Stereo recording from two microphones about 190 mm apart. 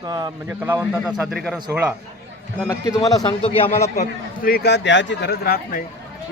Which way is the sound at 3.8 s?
40° left (ahead or behind).